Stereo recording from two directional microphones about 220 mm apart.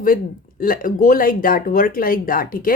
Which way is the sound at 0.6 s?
40° left (ahead or behind).